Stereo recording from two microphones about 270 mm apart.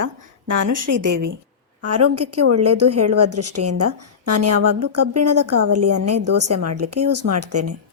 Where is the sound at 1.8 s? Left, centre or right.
Right.